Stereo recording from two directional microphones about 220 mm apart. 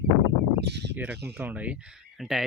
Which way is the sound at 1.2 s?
10° right (ahead or behind).